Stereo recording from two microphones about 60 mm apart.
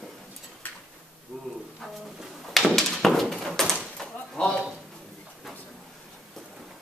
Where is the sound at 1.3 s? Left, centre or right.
Centre.